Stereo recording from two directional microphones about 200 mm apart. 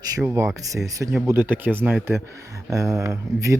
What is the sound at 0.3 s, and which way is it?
Speech, 15° right (ahead or behind).